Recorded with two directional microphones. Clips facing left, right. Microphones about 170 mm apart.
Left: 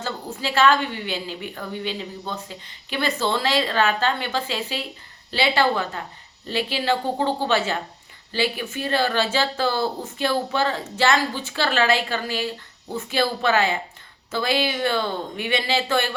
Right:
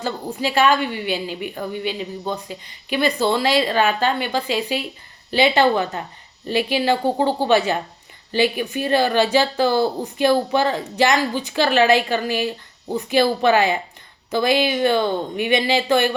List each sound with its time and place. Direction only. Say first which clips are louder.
0.0 s a woman's voice: right 5 dB; 15° right (ahead or behind)